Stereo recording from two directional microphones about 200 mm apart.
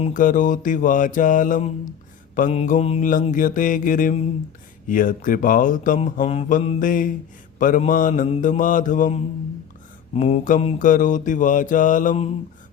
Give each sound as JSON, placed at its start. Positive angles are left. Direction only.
{"t": 0.0, "sound": "speech", "side_deg": 40}